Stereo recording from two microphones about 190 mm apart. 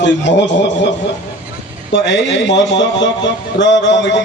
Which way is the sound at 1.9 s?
70° left (ahead or behind).